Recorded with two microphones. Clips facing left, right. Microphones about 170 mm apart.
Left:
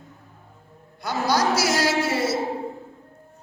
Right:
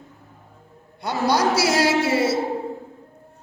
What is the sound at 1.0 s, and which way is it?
A woman's voice, 30° right (ahead or behind).